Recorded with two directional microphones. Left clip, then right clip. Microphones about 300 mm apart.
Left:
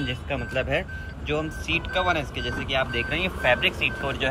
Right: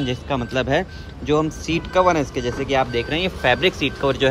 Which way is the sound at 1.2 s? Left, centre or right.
Centre.